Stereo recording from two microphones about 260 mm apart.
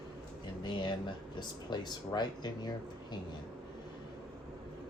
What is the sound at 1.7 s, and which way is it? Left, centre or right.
Speech, centre.